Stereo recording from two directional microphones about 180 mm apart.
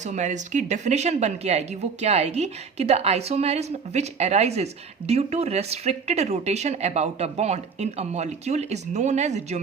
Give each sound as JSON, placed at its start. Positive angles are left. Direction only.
{"t": 0.0, "sound": "a woman's voice", "side_deg": -40}